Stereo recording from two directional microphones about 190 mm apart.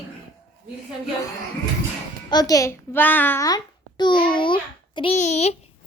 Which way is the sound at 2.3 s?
20° left (ahead or behind).